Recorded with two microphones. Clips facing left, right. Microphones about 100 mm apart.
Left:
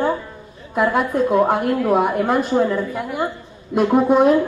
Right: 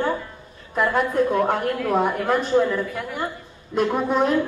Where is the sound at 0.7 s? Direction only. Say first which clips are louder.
Left 2 dB; 15° left (ahead or behind).